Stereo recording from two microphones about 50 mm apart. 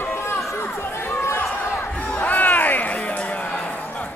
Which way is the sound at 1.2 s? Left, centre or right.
Left.